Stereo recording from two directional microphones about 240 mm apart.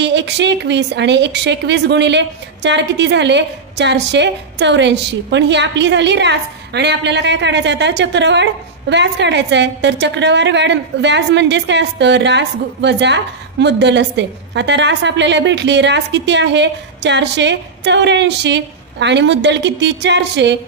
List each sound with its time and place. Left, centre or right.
0.0 s a woman's voice: right